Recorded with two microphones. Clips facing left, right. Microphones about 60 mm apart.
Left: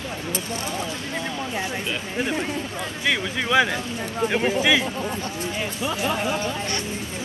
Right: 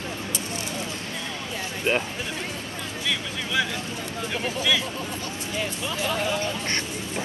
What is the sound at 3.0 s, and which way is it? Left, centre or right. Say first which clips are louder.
Speech: left 7 dB; left.